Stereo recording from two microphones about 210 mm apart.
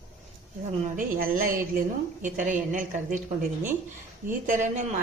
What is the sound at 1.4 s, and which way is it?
A woman's voice, 40° right (ahead or behind).